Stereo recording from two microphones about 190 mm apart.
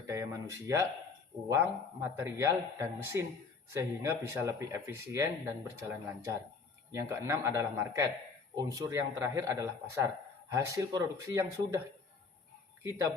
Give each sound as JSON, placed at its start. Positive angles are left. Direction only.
{"t": 0.1, "sound": "speech", "side_deg": -15}
{"t": 12.8, "sound": "speech", "side_deg": -15}